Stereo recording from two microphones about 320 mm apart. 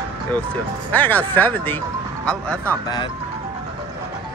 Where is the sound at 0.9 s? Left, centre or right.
Centre.